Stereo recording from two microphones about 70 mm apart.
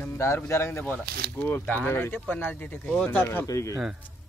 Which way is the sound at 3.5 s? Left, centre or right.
Left.